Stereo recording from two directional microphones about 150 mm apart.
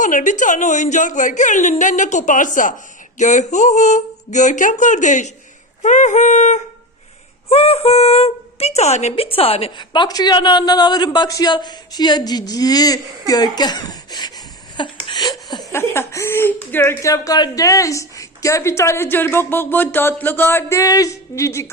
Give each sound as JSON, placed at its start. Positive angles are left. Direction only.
{"t": 0.0, "sound": "a woman's voice", "side_deg": 60}
{"t": 7.5, "sound": "speech", "side_deg": 40}
{"t": 14.8, "sound": "a sound", "side_deg": 30}
{"t": 15.7, "sound": "speech", "side_deg": 15}